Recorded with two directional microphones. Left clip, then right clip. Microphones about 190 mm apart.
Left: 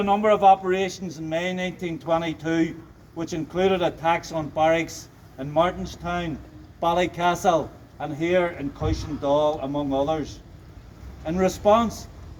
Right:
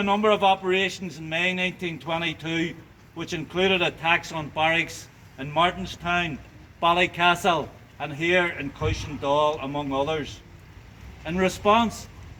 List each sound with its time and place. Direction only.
0.0 s a man's voice: 15° right (ahead or behind)
9.7 s speech: 30° right (ahead or behind)
11.3 s a man's voice: centre (ahead or behind)